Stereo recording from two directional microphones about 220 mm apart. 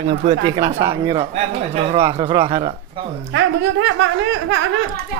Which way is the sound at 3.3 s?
55° right (ahead or behind).